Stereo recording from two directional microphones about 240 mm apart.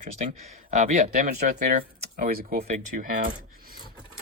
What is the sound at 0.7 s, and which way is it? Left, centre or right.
Speech, right.